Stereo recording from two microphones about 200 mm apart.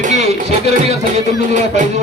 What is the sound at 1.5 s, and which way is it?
Speech, 35° right (ahead or behind).